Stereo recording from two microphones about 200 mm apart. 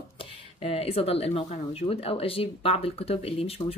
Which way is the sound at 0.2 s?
30° left (ahead or behind).